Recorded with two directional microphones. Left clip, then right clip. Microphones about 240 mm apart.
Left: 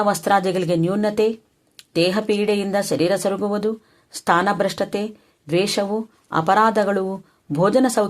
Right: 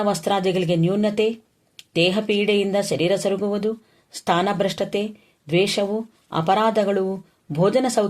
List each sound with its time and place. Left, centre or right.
0.0 s speech: left